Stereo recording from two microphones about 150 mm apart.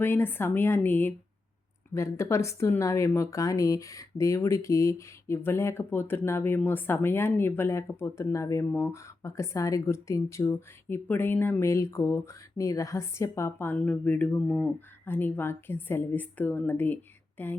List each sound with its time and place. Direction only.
0.0 s speech: 15° left (ahead or behind)